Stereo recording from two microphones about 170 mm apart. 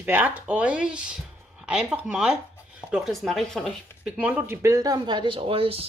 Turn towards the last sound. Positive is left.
turn(degrees=-35)  # may be behind; listen again after turning